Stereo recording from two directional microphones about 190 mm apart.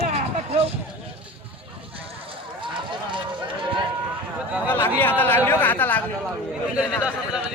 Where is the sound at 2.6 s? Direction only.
25° right (ahead or behind).